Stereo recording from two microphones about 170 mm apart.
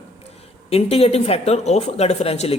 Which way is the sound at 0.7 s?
35° left (ahead or behind).